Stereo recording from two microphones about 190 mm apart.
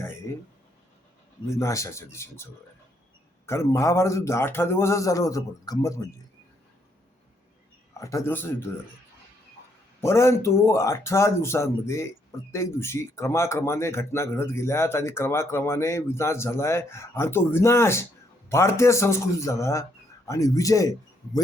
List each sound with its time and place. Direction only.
1.5 s speech: 15° left (ahead or behind)
7.9 s speech: 15° left (ahead or behind)
10.0 s speech: 15° left (ahead or behind)